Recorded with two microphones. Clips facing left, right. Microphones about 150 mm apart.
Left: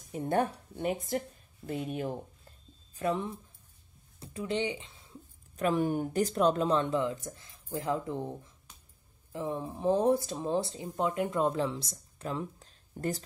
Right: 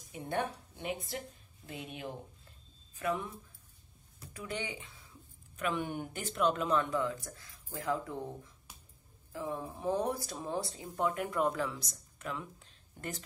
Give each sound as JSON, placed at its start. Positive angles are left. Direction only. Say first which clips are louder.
{"t": 0.1, "sound": "a woman's voice", "louder": "left 6 dB", "side_deg": 45}
{"t": 3.0, "sound": "speech", "louder": "left 4 dB", "side_deg": 30}
{"t": 5.6, "sound": "speech", "louder": "left 7 dB", "side_deg": 40}
{"t": 9.3, "sound": "speech", "louder": "left 4 dB", "side_deg": 20}